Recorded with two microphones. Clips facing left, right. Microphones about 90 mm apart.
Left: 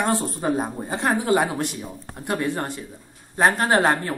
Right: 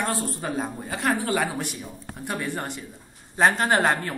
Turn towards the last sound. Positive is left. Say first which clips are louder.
# left 3 dB
turn(degrees=15)  # may be behind; listen again after turning